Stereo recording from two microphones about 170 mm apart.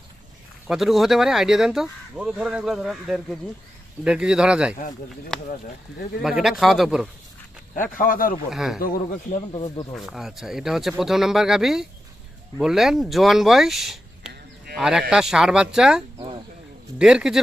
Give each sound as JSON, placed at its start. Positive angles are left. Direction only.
{"t": 0.7, "sound": "speech", "side_deg": 0}
{"t": 7.8, "sound": "speech", "side_deg": 55}
{"t": 8.4, "sound": "speech", "side_deg": 0}
{"t": 9.9, "sound": "speech", "side_deg": 0}
{"t": 16.1, "sound": "a sound", "side_deg": -35}
{"t": 17.0, "sound": "speech", "side_deg": -5}